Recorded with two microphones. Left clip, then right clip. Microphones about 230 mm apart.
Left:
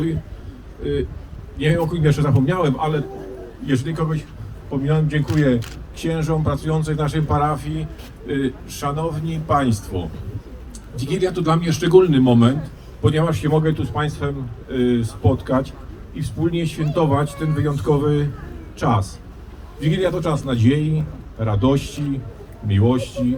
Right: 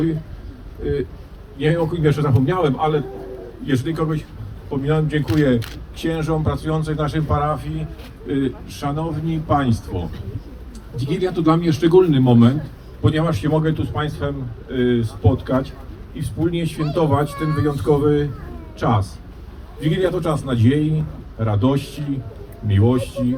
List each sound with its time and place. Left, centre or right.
0.8 s a man's voice: centre; by 7.7 s left
8.3 s a man's voice: left
13.0 s a man's voice: left; by 23.2 s centre